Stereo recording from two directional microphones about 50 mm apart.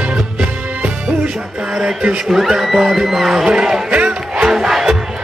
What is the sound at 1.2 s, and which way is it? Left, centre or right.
Music, centre.